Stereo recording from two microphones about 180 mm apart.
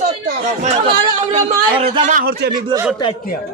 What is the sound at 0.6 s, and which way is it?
A man's voice, 40° right (ahead or behind).